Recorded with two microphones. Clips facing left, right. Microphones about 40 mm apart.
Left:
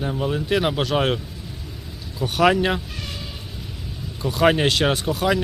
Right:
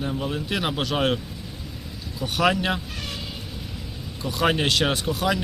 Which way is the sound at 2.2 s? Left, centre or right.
Centre.